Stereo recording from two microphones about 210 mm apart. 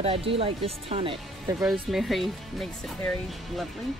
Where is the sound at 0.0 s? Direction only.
25° right (ahead or behind).